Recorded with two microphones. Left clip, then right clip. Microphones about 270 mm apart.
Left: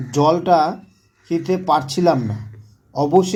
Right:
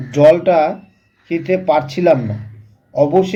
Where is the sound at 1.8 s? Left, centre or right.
Centre.